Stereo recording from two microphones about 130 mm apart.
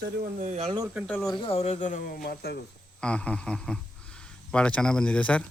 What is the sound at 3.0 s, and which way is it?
Speech, 10° left (ahead or behind).